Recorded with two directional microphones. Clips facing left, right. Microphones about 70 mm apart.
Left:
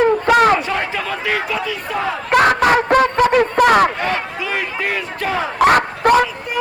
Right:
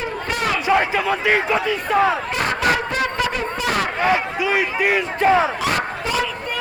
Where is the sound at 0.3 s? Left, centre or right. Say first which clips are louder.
Left 13 dB; left.